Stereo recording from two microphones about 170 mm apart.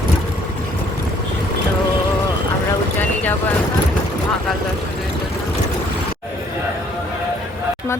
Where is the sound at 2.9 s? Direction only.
10° left (ahead or behind).